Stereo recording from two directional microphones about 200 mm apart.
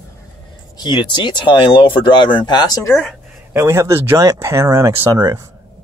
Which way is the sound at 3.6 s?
15° right (ahead or behind).